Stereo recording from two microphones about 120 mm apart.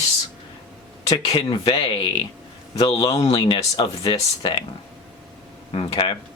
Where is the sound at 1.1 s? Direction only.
45° left (ahead or behind).